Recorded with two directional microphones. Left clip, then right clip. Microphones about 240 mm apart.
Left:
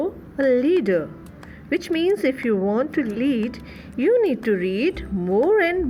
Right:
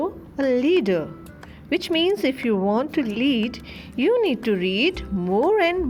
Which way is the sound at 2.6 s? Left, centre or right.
Right.